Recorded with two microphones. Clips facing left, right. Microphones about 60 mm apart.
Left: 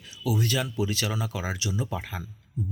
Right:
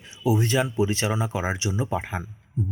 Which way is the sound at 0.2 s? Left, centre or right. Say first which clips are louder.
Right 5 dB; right.